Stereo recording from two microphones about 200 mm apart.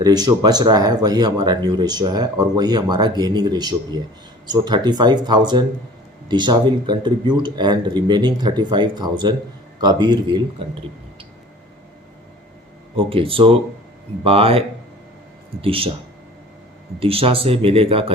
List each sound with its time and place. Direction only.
0.0 s speech: 20° right (ahead or behind)
13.0 s speech: 25° right (ahead or behind)
15.6 s speech: 25° right (ahead or behind)
17.0 s speech: 30° right (ahead or behind)